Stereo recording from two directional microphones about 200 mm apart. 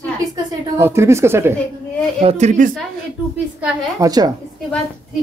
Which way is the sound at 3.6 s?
15° right (ahead or behind).